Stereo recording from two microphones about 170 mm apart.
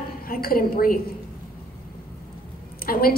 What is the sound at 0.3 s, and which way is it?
Speech, 60° left (ahead or behind).